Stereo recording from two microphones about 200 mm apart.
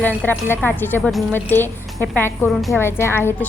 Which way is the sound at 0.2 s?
10° left (ahead or behind).